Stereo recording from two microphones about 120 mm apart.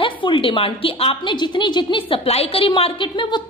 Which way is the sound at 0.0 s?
45° left (ahead or behind).